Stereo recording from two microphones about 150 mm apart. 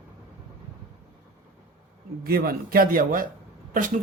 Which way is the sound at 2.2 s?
85° right.